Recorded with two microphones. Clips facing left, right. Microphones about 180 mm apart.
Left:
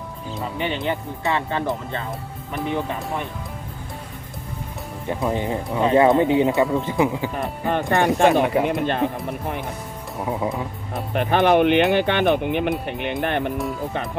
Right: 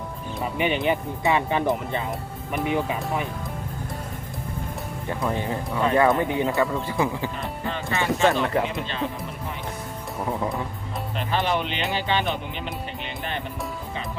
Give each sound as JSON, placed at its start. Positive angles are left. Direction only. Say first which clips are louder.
{"t": 0.6, "sound": "speech", "louder": "right 2 dB", "side_deg": -15}
{"t": 5.0, "sound": "speech", "louder": "left 4 dB", "side_deg": 20}
{"t": 7.6, "sound": "speech", "louder": "left 8 dB", "side_deg": 60}
{"t": 8.2, "sound": "speech", "louder": "left 3 dB", "side_deg": 15}
{"t": 8.6, "sound": "speech", "louder": "left 7 dB", "side_deg": 55}
{"t": 11.1, "sound": "speech", "louder": "left 8 dB", "side_deg": 55}